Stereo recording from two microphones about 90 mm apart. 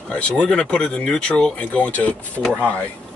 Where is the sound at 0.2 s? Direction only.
10° left (ahead or behind).